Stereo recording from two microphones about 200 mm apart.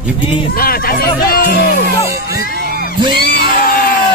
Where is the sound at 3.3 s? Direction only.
50° left (ahead or behind).